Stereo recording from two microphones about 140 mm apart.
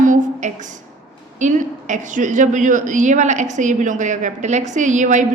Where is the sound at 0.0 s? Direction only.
60° right (ahead or behind).